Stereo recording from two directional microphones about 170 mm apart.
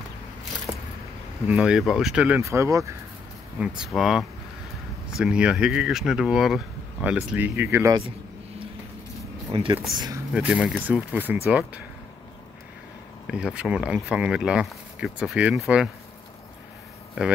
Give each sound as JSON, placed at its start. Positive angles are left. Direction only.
{"t": 1.5, "sound": "speech", "side_deg": -5}
{"t": 3.5, "sound": "speech", "side_deg": -5}
{"t": 9.5, "sound": "speech", "side_deg": -30}
{"t": 10.3, "sound": "speech", "side_deg": -5}
{"t": 13.3, "sound": "speech", "side_deg": -5}